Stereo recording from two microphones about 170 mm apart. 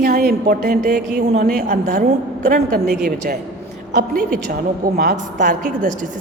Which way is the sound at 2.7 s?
65° right (ahead or behind).